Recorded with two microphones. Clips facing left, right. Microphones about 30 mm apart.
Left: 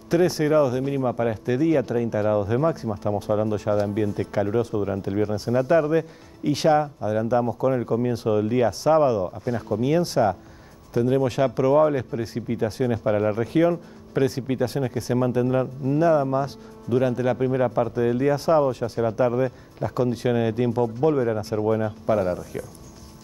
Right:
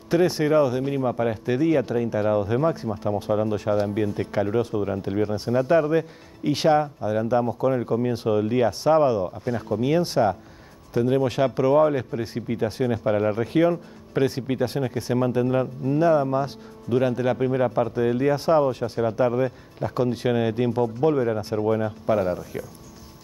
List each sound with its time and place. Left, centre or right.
0.1 s speech: right; by 22.5 s centre